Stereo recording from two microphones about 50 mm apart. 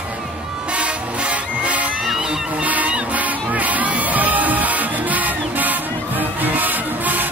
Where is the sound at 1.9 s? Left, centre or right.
Centre.